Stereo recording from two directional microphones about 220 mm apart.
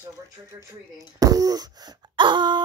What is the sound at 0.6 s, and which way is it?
Speech, 15° right (ahead or behind).